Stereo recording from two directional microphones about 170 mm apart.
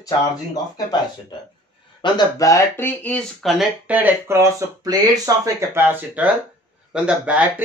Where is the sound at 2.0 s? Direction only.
20° left (ahead or behind).